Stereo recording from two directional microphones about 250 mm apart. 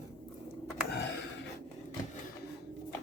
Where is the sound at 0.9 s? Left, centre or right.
Left.